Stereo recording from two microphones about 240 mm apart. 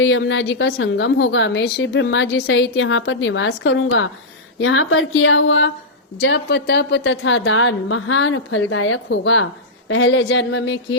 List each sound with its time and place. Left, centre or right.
0.0 s a woman's voice: left